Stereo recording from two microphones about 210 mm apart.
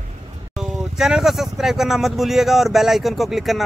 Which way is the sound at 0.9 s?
Centre (ahead or behind).